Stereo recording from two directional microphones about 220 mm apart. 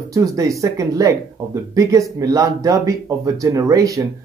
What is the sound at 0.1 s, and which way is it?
Speech, 15° right (ahead or behind).